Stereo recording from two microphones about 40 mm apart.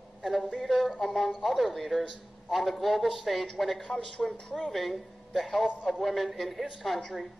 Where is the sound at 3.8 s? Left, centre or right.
Left.